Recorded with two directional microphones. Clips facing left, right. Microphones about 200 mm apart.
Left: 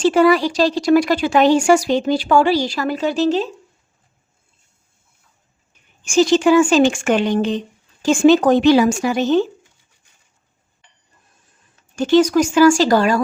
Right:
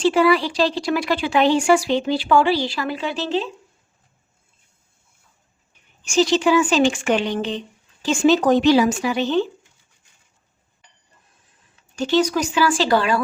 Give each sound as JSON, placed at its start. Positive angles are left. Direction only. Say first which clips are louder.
{"t": 0.0, "sound": "speech", "louder": "left 3 dB", "side_deg": 45}
{"t": 6.1, "sound": "speech", "louder": "left 4 dB", "side_deg": 50}
{"t": 11.8, "sound": "speech", "louder": "left 5 dB", "side_deg": 50}